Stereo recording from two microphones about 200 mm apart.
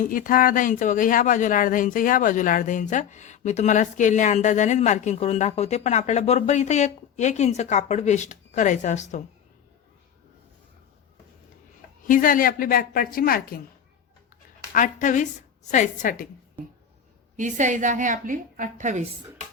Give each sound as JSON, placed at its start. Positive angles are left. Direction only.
{"t": 0.0, "sound": "speech", "side_deg": 45}
{"t": 12.0, "sound": "a woman's voice", "side_deg": 45}
{"t": 14.7, "sound": "a woman's voice", "side_deg": 40}
{"t": 17.3, "sound": "a woman's voice", "side_deg": -40}